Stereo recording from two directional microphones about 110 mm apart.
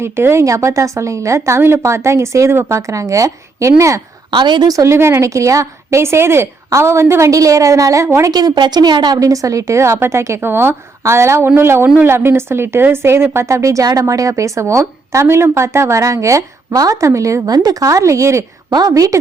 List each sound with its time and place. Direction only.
0.0 s a woman's voice: 25° right (ahead or behind)
4.3 s a woman's voice: 45° right (ahead or behind); by 8.3 s 25° right (ahead or behind)
8.3 s a woman's voice: 40° right (ahead or behind)